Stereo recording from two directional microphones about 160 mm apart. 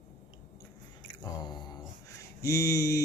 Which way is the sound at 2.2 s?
20° left (ahead or behind).